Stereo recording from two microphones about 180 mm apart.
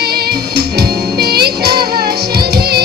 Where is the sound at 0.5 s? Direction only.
60° right (ahead or behind).